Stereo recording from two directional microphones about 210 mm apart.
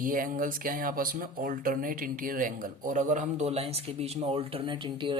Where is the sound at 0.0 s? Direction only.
40° right (ahead or behind).